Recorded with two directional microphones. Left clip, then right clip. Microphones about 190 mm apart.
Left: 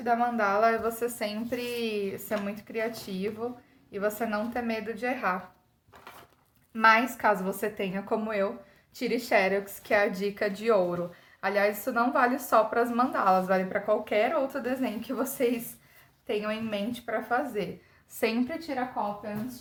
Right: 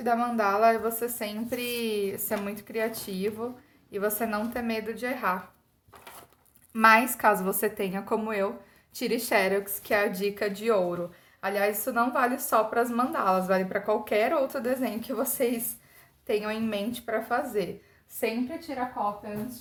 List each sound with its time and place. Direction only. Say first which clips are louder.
0.0 s a woman's voice: even; 30° right (ahead or behind); by 5.4 s 10° right (ahead or behind)
6.7 s a woman's voice: right 2 dB; 25° right (ahead or behind)
18.2 s a woman's voice: left 1 dB; 15° left (ahead or behind)
18.7 s a woman's voice: even; 30° left (ahead or behind)